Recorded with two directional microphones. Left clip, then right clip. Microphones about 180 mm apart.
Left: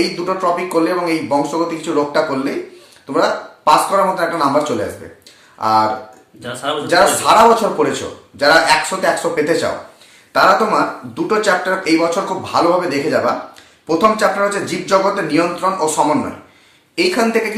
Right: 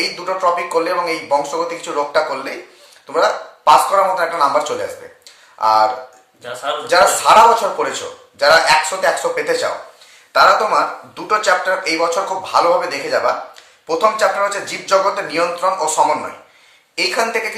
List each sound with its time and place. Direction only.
0.3 s speech: 15° right (ahead or behind)
6.4 s speech: 15° left (ahead or behind)
7.2 s speech: 15° right (ahead or behind)